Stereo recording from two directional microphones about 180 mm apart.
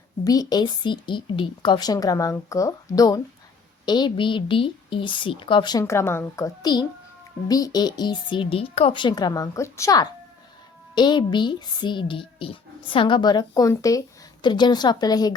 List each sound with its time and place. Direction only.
0.3 s speech: 20° left (ahead or behind)
5.8 s a woman's voice: 15° left (ahead or behind)